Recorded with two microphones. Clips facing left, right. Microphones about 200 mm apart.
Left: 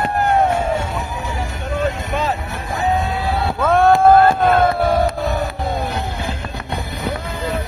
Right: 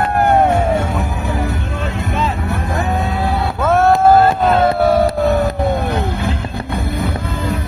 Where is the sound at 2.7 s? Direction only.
60° right (ahead or behind).